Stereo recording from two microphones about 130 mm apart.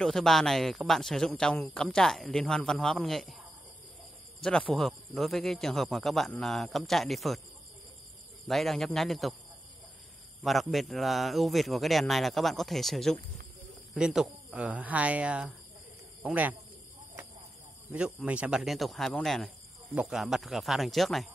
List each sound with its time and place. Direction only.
0.0 s speech: 5° left (ahead or behind)
4.4 s speech: 5° left (ahead or behind)
8.5 s speech: centre (ahead or behind)
10.4 s speech: centre (ahead or behind)
17.9 s speech: 10° right (ahead or behind)